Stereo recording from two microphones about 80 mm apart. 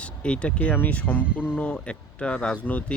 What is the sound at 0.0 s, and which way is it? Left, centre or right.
Speech, centre.